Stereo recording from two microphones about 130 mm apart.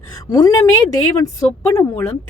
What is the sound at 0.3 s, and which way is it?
A woman's voice, 30° left (ahead or behind).